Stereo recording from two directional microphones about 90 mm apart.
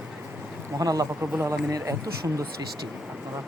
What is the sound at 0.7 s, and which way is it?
Speech, 45° right (ahead or behind).